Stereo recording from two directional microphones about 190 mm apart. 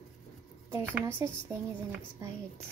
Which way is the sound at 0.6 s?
15° right (ahead or behind).